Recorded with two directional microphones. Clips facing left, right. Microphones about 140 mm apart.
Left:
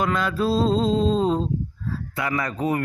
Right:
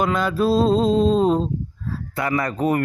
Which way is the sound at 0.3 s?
55° right (ahead or behind).